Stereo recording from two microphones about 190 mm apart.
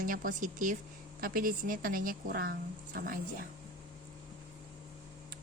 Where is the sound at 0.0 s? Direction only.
45° right (ahead or behind).